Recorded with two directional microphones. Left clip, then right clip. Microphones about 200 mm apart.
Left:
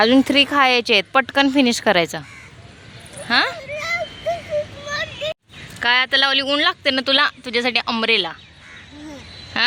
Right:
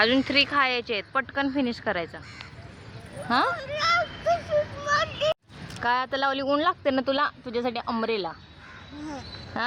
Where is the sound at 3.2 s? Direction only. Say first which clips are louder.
Left 6 dB; 20° left (ahead or behind).